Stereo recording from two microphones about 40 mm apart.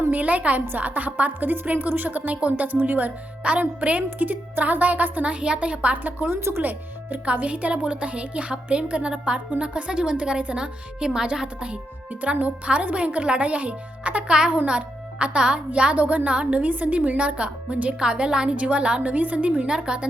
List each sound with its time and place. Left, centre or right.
0.1 s a woman's voice: right
5.2 s a woman's voice: right
5.9 s a woman's voice: right
6.3 s speech: right
6.6 s speech: right
7.4 s a woman's voice: right; by 11.4 s centre
12.2 s speech: right
14.3 s a woman's voice: right
19.1 s speech: right
19.6 s a woman's voice: centre